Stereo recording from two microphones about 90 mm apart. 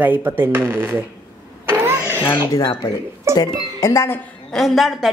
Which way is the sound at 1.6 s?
25° right (ahead or behind).